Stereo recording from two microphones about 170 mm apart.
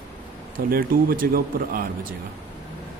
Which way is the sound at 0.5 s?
60° right (ahead or behind).